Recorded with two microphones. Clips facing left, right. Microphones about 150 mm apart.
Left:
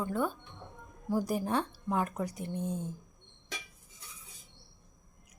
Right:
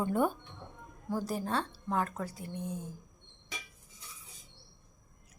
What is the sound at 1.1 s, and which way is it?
Speech, 15° left (ahead or behind).